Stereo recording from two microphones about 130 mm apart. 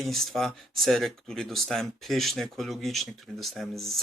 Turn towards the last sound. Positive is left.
turn(degrees=0)  # may be behind; listen again after turning